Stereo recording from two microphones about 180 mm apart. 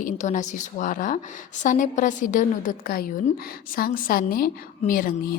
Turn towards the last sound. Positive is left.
turn(degrees=55)  # may be behind; listen again after turning